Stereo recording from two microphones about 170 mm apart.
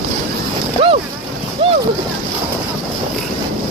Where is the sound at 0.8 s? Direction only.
35° right (ahead or behind).